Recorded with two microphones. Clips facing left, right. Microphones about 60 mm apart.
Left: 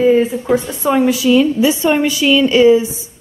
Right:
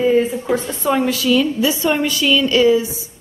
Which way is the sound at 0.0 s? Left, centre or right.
Centre.